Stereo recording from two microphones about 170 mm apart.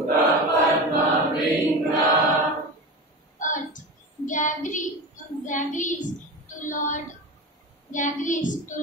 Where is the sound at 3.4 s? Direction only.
50° left (ahead or behind).